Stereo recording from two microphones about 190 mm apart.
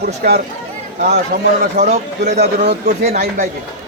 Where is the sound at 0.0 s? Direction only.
55° right (ahead or behind); by 2.4 s 40° right (ahead or behind).